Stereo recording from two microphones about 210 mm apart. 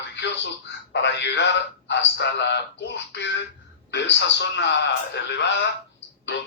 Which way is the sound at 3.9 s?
55° left (ahead or behind).